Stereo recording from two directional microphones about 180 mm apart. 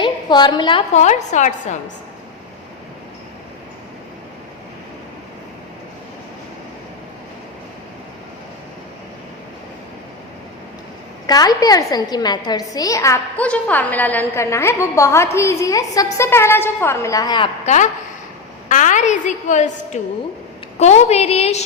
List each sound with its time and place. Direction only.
0.0 s a woman's voice: 25° left (ahead or behind)
0.9 s a woman's voice: 40° left (ahead or behind)
11.3 s a woman's voice: 20° left (ahead or behind)
18.7 s a woman's voice: 45° left (ahead or behind)